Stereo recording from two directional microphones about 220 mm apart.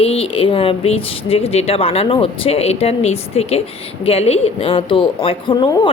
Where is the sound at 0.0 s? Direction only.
25° left (ahead or behind).